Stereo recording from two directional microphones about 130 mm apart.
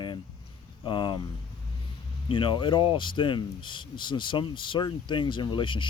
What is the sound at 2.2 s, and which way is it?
Speech, 40° left (ahead or behind).